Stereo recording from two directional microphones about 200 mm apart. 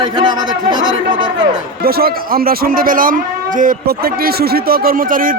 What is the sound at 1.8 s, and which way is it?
A man's voice, 50° right (ahead or behind).